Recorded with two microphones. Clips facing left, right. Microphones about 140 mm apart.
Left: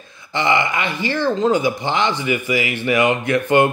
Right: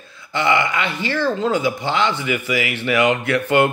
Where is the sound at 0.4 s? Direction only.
20° left (ahead or behind).